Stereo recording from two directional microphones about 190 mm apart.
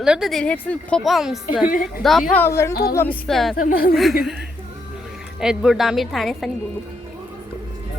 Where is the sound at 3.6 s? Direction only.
50° left (ahead or behind).